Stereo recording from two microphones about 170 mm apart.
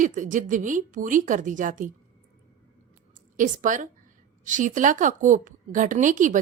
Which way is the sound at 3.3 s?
50° right (ahead or behind).